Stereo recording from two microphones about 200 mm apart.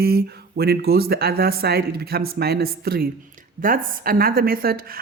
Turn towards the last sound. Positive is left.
turn(degrees=-50)  # may be behind; listen again after turning